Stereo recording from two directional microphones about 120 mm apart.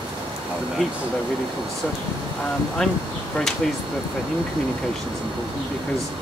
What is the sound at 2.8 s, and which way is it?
Speech, 5° left (ahead or behind).